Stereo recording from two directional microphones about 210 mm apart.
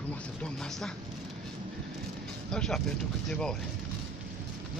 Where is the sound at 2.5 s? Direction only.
5° left (ahead or behind).